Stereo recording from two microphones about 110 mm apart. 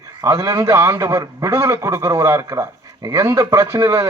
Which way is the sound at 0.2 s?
30° right (ahead or behind).